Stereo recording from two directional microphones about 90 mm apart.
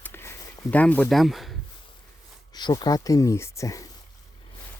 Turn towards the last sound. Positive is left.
turn(degrees=35)  # may be behind; listen again after turning